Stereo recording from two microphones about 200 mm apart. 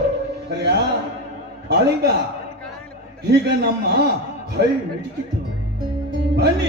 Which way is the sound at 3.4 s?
55° right (ahead or behind).